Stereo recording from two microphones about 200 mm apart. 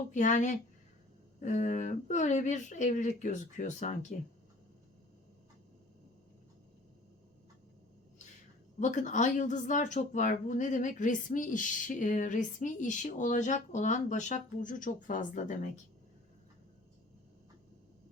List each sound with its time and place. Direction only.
0.1 s a woman's voice: 40° left (ahead or behind)
8.8 s a woman's voice: 40° left (ahead or behind)